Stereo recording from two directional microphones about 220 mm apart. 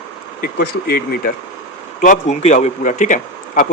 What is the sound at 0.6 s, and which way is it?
Speech, 45° left (ahead or behind).